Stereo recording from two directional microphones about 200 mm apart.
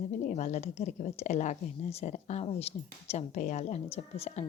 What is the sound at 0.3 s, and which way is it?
A woman's voice, 35° left (ahead or behind).